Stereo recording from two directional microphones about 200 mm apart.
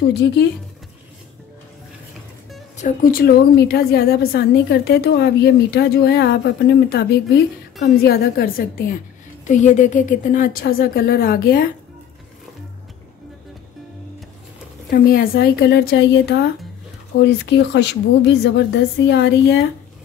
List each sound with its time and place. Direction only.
2.8 s a woman's voice: 45° left (ahead or behind)
14.9 s a woman's voice: 45° left (ahead or behind)